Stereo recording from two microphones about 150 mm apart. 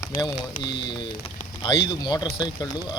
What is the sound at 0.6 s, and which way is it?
Speech, 30° left (ahead or behind).